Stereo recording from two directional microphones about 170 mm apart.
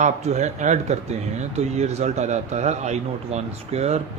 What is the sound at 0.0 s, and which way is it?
Speech, 45° right (ahead or behind).